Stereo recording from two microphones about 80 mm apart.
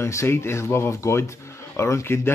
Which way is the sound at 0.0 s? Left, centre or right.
Left.